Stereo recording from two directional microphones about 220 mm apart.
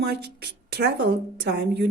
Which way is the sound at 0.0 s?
45° right (ahead or behind).